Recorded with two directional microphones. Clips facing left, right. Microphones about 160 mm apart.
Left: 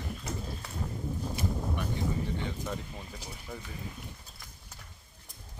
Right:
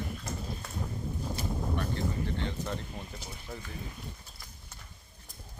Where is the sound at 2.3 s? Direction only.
5° left (ahead or behind).